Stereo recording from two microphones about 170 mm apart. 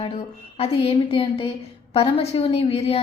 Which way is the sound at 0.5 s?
35° left (ahead or behind).